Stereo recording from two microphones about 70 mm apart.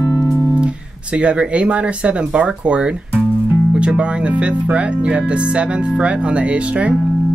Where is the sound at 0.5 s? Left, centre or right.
Centre.